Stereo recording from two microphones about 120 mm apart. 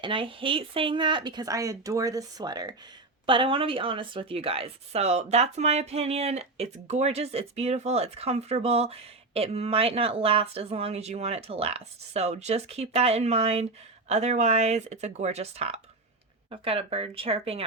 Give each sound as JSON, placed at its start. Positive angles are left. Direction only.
{"t": 0.0, "sound": "speech", "side_deg": -45}
{"t": 3.2, "sound": "a woman's voice", "side_deg": -45}
{"t": 14.1, "sound": "a woman's voice", "side_deg": -70}